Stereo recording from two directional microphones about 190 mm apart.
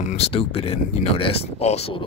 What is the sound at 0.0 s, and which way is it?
Speech, 35° left (ahead or behind).